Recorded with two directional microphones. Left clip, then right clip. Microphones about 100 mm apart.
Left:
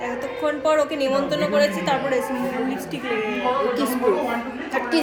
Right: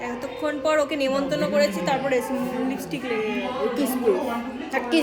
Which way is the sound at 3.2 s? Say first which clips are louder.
Left 5 dB; 25° right (ahead or behind).